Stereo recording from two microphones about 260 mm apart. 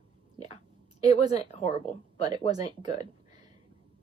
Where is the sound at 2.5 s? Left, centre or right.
Centre.